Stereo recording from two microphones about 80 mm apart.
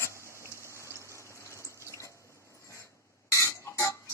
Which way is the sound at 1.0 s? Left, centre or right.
Left.